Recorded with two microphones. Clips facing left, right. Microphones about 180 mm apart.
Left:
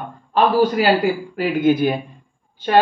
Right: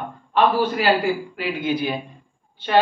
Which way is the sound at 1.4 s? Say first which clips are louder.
Left 7 dB; 50° left (ahead or behind).